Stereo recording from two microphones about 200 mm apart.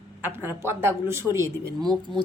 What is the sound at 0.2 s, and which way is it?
A woman's voice, 10° right (ahead or behind).